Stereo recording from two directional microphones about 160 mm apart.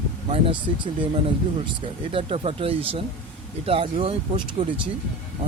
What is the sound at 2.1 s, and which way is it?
Speech, 35° right (ahead or behind).